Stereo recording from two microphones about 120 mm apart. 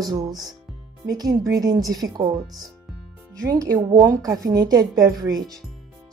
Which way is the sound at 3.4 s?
30° right (ahead or behind).